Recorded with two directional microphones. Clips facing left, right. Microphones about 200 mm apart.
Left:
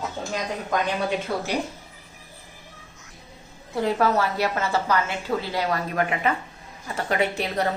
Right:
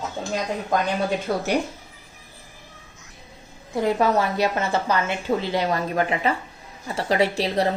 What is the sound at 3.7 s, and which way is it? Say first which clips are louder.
A woman's voice: right 2 dB; 15° right (ahead or behind).